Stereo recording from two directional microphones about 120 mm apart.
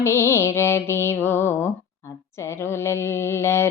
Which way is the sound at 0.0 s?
20° left (ahead or behind).